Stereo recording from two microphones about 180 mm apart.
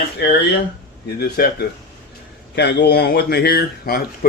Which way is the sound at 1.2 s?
60° left (ahead or behind).